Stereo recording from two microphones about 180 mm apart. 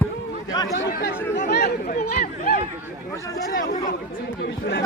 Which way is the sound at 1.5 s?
55° left (ahead or behind).